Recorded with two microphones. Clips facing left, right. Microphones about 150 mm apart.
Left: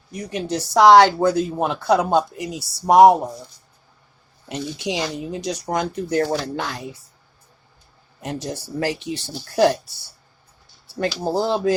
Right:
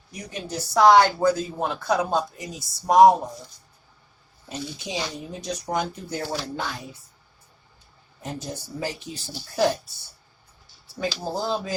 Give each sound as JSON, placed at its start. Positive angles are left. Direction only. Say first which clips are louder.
{"t": 0.1, "sound": "speech", "louder": "left 8 dB", "side_deg": 70}
{"t": 4.4, "sound": "speech", "louder": "left 7 dB", "side_deg": 80}
{"t": 5.4, "sound": "speech", "louder": "left 2 dB", "side_deg": 90}
{"t": 8.2, "sound": "speech", "louder": "left 5 dB", "side_deg": 75}
{"t": 11.0, "sound": "speech", "louder": "left 6 dB", "side_deg": 70}